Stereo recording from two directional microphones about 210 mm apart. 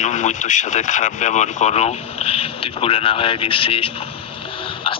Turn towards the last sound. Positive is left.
turn(degrees=25)  # may be behind; listen again after turning